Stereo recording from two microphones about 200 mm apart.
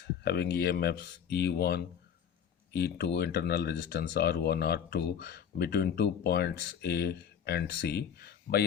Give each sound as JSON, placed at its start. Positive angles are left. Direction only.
{"t": 0.0, "sound": "speech", "side_deg": 55}